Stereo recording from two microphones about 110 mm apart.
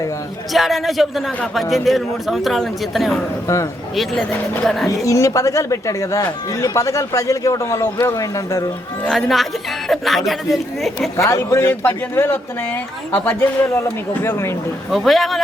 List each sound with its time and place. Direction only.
0.5 s a man's voice: centre (ahead or behind)
5.0 s speech: 30° left (ahead or behind)
9.9 s a man's voice: centre (ahead or behind)
11.2 s speech: 25° left (ahead or behind)
14.8 s a man's voice: centre (ahead or behind)